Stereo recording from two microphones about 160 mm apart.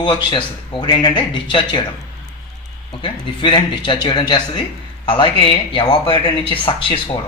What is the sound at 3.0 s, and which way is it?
A man's voice, 30° left (ahead or behind).